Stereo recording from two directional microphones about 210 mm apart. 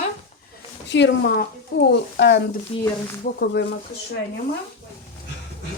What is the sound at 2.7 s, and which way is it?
Speech, 25° left (ahead or behind).